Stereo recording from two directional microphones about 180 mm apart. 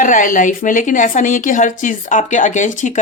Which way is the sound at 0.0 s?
45° left (ahead or behind).